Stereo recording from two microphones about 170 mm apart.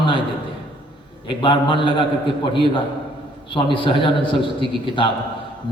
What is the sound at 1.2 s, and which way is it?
Speech, 30° left (ahead or behind).